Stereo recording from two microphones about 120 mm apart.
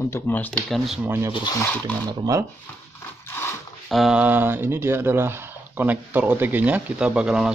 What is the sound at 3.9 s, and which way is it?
Speech, centre (ahead or behind).